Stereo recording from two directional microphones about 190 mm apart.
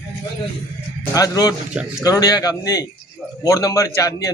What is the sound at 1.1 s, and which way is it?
Speech, 20° left (ahead or behind).